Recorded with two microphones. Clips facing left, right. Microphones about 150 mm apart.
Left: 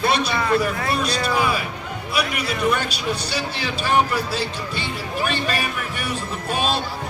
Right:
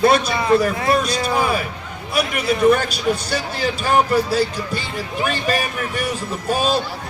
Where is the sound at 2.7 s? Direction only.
45° right (ahead or behind).